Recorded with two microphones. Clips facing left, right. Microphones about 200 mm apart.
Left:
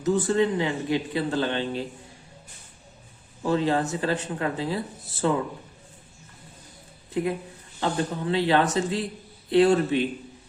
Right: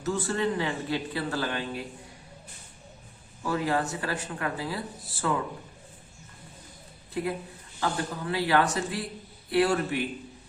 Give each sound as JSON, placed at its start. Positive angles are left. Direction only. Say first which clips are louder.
{"t": 0.0, "sound": "speech", "louder": "left 6 dB", "side_deg": 20}
{"t": 3.4, "sound": "speech", "louder": "left 4 dB", "side_deg": 25}
{"t": 7.8, "sound": "speech", "louder": "left 4 dB", "side_deg": 25}